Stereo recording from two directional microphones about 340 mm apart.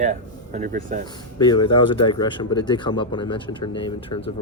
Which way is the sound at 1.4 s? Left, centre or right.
Centre.